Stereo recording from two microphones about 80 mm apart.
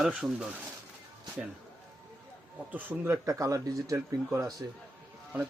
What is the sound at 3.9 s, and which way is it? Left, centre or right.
Speech, right.